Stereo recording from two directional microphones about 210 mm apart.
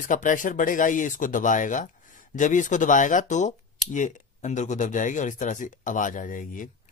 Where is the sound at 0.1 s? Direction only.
40° left (ahead or behind).